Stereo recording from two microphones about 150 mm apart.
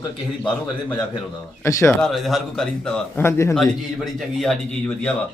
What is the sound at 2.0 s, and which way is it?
A man's voice, centre (ahead or behind).